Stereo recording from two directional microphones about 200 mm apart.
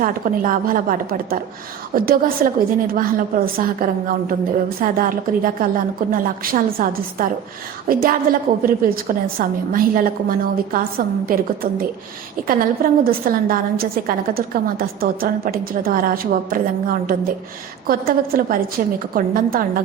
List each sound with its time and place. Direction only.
0.0 s a woman's voice: 45° right (ahead or behind)